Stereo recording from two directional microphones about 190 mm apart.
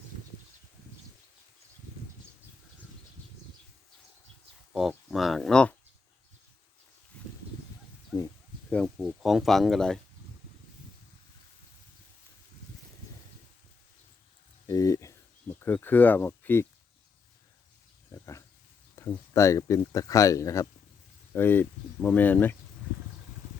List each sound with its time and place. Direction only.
4.7 s speech: centre (ahead or behind)
8.7 s speech: centre (ahead or behind)
14.7 s a sound: 20° left (ahead or behind)
15.5 s speech: 10° left (ahead or behind)
18.1 s a sound: 15° left (ahead or behind)
18.9 s speech: 15° left (ahead or behind)